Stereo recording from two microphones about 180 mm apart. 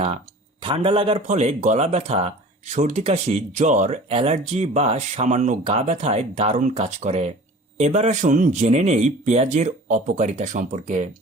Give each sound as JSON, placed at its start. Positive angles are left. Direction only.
{"t": 0.6, "sound": "speech", "side_deg": -30}